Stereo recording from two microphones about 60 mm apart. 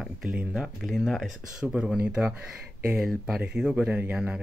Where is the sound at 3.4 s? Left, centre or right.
Centre.